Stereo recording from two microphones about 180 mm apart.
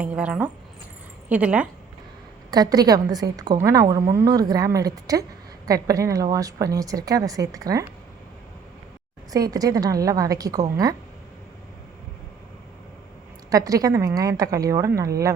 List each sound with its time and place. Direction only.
0.0 s speech: 5° right (ahead or behind)
2.5 s a woman's voice: 20° right (ahead or behind)
9.3 s a woman's voice: 20° right (ahead or behind)
13.5 s a woman's voice: 20° right (ahead or behind)